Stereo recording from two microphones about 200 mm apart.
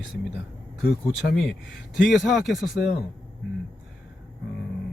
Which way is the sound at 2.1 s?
Centre (ahead or behind).